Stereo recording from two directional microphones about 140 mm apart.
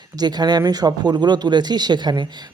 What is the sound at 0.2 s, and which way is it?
Speech, 30° right (ahead or behind).